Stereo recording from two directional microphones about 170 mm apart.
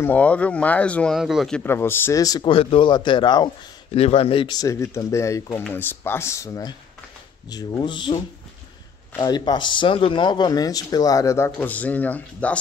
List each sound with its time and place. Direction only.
0.0 s speech: 10° left (ahead or behind)
1.6 s speech: 15° left (ahead or behind)